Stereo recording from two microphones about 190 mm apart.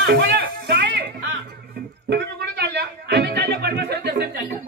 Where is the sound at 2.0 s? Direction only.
60° right (ahead or behind).